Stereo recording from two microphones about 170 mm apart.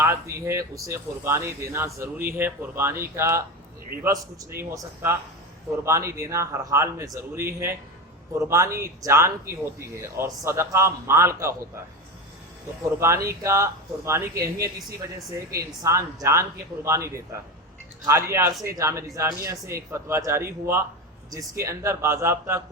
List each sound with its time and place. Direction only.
0.0 s speech: 15° right (ahead or behind)
13.0 s speech: 15° right (ahead or behind)